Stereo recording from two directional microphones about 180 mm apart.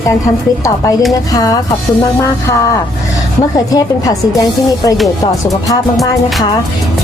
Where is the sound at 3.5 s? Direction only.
20° left (ahead or behind).